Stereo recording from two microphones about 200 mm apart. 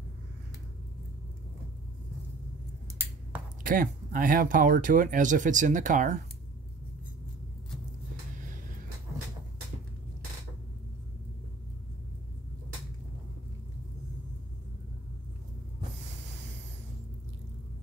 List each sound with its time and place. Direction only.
3.6 s speech: 45° right (ahead or behind)